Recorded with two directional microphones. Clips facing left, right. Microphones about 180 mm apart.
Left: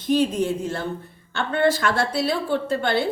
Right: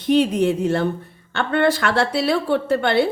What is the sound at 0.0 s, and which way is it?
A woman's voice, 65° right (ahead or behind).